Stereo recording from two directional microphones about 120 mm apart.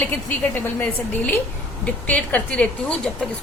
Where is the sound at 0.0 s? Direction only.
15° left (ahead or behind).